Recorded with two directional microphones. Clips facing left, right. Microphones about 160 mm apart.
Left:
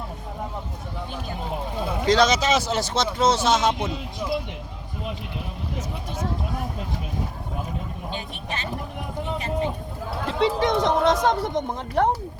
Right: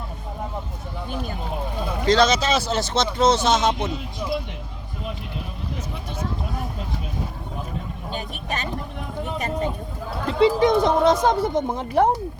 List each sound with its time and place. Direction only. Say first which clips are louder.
1.8 s speech: right 1 dB; 15° left (ahead or behind)
8.1 s speech: right 5 dB; 45° right (ahead or behind)
10.2 s speech: right 5 dB; centre (ahead or behind)